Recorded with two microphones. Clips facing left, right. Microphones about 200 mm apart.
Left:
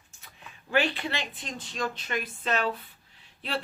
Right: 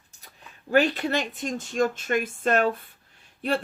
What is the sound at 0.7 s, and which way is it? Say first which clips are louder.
Speech: right 6 dB; 40° right (ahead or behind).